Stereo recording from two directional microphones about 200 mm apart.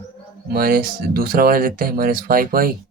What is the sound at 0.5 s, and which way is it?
Speech, 45° right (ahead or behind).